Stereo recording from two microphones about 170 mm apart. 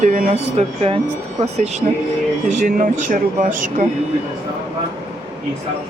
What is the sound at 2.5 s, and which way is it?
Speech, 50° right (ahead or behind).